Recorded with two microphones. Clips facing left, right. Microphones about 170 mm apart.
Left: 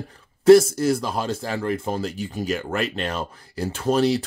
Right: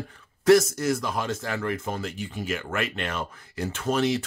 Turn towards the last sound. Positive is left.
turn(degrees=35)  # may be behind; listen again after turning